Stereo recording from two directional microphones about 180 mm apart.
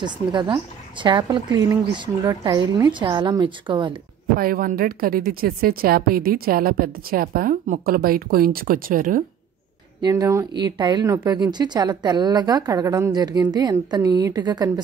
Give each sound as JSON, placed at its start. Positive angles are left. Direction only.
{"t": 0.0, "sound": "a woman's voice", "side_deg": -25}
{"t": 4.4, "sound": "a woman's voice", "side_deg": -50}
{"t": 10.0, "sound": "a woman's voice", "side_deg": -20}